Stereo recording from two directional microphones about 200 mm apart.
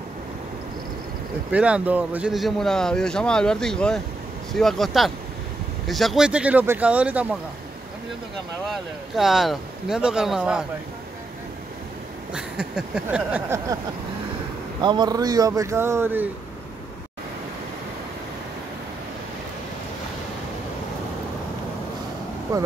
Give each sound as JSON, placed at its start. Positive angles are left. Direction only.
{"t": 1.5, "sound": "speech", "side_deg": -5}
{"t": 8.6, "sound": "speech", "side_deg": 0}
{"t": 12.4, "sound": "speech", "side_deg": -5}
{"t": 14.8, "sound": "speech", "side_deg": -20}